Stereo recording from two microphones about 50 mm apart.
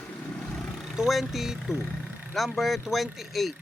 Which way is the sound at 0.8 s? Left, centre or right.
Centre.